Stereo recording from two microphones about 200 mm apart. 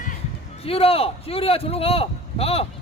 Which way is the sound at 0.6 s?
30° left (ahead or behind).